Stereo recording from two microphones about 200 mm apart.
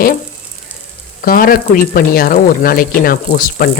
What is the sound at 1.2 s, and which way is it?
Speech, 45° left (ahead or behind).